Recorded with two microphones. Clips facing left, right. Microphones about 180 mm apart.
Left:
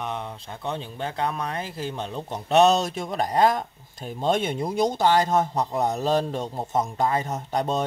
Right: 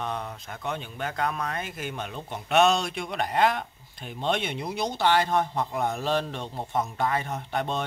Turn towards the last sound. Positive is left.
turn(degrees=40)  # may be behind; listen again after turning